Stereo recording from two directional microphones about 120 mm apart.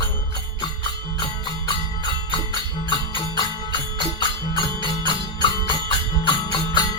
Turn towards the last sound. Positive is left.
turn(degrees=40)  # may be behind; listen again after turning